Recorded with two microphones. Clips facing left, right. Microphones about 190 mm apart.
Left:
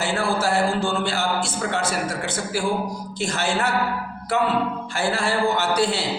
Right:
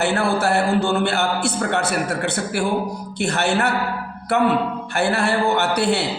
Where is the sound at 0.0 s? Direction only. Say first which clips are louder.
Right 3 dB; 65° right (ahead or behind).